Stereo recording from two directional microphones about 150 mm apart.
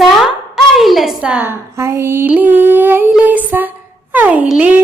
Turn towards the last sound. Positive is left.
turn(degrees=-10)  # may be behind; listen again after turning